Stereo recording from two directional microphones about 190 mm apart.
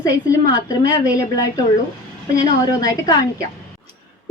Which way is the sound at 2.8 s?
20° left (ahead or behind).